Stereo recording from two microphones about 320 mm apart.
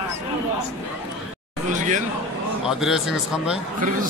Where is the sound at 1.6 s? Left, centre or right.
Right.